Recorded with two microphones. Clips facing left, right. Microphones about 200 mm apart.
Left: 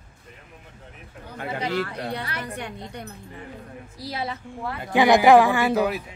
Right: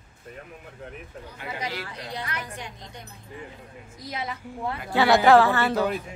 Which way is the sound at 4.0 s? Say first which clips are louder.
Left 3 dB; 30° left (ahead or behind).